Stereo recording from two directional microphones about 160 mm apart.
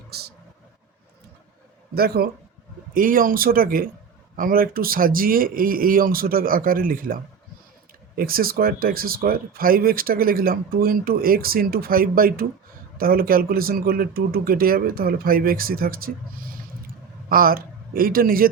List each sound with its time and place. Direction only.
0.1 s speech: 80° right
2.0 s speech: 75° right (ahead or behind)
2.9 s speech: 60° right (ahead or behind)